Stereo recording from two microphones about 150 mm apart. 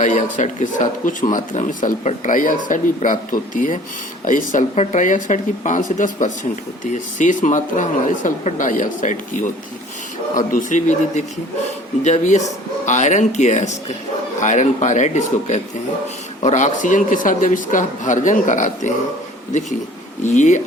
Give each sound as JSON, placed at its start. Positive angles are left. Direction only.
{"t": 0.0, "sound": "speech", "side_deg": 55}
{"t": 20.2, "sound": "speech", "side_deg": 50}